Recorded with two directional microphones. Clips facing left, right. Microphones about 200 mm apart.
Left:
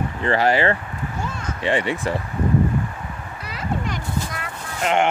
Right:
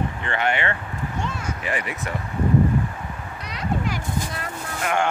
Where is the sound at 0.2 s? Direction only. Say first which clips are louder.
Left 8 dB; 35° left (ahead or behind).